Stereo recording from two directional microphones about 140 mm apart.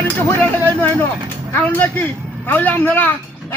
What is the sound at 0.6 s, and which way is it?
Speech, 10° left (ahead or behind).